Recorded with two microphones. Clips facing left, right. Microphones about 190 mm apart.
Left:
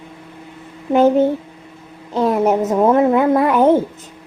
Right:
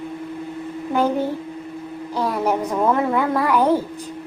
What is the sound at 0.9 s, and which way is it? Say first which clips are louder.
A woman's voice: left 8 dB; 20° left (ahead or behind).